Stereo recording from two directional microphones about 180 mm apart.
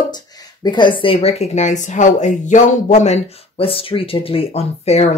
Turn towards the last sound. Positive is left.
turn(degrees=35)  # may be behind; listen again after turning